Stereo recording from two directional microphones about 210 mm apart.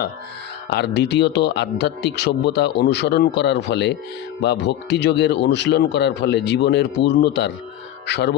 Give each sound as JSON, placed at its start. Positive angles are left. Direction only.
{"t": 0.7, "sound": "speech", "side_deg": 55}